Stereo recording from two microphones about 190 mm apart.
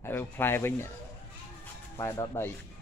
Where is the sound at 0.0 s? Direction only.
10° left (ahead or behind).